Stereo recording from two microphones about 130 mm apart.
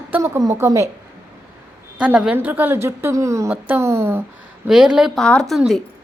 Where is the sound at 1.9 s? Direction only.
10° right (ahead or behind).